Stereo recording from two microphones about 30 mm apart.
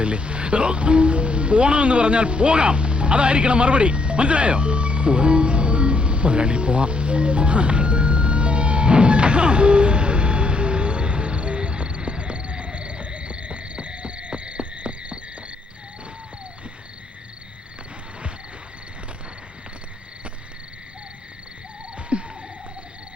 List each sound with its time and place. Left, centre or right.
0.0 s music: right
22.1 s frog: right